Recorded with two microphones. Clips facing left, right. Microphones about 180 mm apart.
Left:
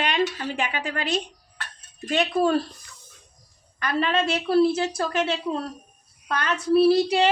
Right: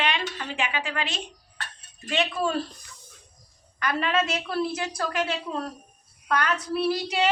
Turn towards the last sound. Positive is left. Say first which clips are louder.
# left 7 dB
turn(degrees=30)  # may be behind; listen again after turning